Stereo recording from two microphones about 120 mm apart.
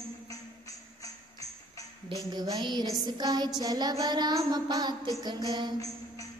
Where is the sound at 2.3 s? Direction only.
35° right (ahead or behind).